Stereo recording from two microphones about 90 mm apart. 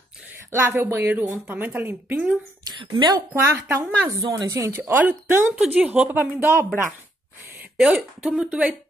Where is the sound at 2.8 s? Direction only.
60° right (ahead or behind).